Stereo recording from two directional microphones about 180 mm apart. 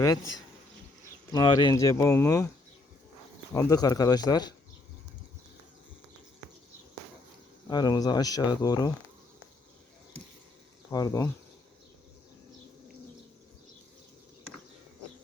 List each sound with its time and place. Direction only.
0.0 s speech: 20° left (ahead or behind)
3.5 s speech: 20° left (ahead or behind)
7.7 s speech: 20° left (ahead or behind)
10.8 s speech: 20° left (ahead or behind)